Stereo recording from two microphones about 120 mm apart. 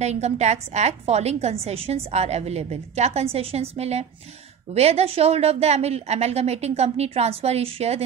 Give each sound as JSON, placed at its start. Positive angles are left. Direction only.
{"t": 0.0, "sound": "a woman's voice", "side_deg": -70}